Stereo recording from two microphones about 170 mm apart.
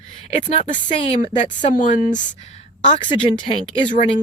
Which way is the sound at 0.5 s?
45° left (ahead or behind).